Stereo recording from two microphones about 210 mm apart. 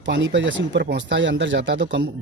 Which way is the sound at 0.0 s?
60° right (ahead or behind).